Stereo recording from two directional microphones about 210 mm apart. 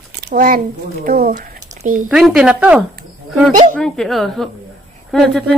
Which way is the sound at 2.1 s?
5° right (ahead or behind).